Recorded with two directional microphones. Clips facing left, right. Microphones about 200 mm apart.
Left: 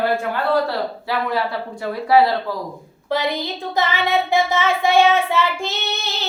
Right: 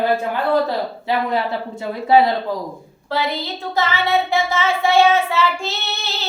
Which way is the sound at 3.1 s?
15° left (ahead or behind).